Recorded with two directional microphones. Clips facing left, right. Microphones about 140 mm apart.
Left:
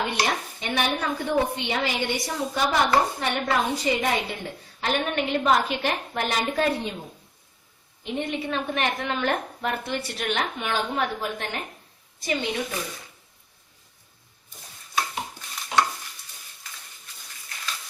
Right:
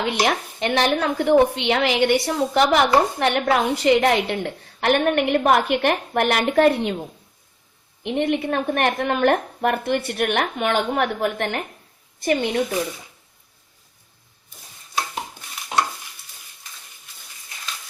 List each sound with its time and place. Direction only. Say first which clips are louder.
0.3 s a woman's voice: right 6 dB; 80° right; by 6.9 s 65° right (ahead or behind)
8.0 s a woman's voice: right 7 dB; 65° right (ahead or behind)